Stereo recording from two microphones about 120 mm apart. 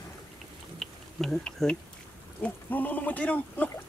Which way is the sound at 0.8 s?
Centre (ahead or behind).